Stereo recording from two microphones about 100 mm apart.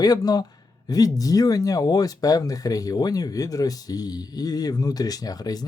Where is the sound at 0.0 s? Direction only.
40° left (ahead or behind).